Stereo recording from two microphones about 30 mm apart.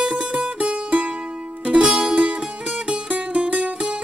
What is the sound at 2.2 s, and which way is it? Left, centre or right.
Music, right.